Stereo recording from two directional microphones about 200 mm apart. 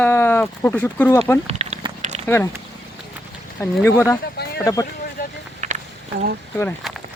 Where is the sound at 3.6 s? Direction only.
15° left (ahead or behind).